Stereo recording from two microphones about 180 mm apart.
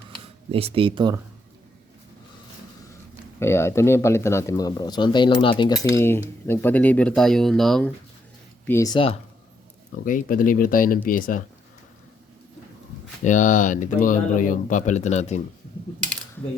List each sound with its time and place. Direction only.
0.5 s speech: 30° right (ahead or behind)
3.4 s speech: 15° left (ahead or behind)
8.6 s speech: 15° left (ahead or behind)
10.0 s speech: 50° left (ahead or behind)
13.2 s speech: 45° left (ahead or behind)